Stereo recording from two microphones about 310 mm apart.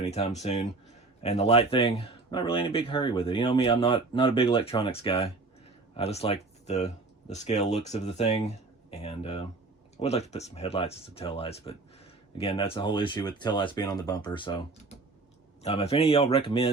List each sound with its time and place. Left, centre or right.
0.0 s speech: left